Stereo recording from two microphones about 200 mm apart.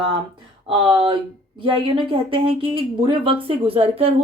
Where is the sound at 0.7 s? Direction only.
25° right (ahead or behind).